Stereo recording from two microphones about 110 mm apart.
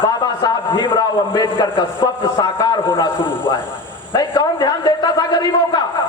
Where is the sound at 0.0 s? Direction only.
40° left (ahead or behind).